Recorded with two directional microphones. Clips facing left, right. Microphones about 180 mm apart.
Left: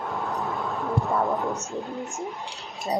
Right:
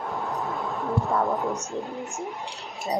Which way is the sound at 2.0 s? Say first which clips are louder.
Left 1 dB; 15° right (ahead or behind).